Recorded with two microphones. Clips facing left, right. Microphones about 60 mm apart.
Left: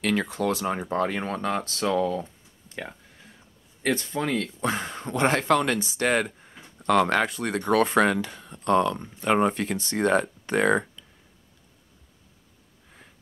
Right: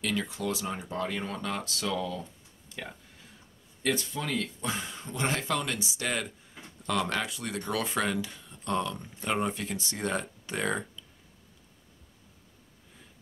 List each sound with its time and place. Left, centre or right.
0.0 s speech: left
3.8 s speech: left